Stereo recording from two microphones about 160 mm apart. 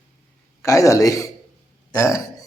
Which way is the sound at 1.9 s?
20° left (ahead or behind).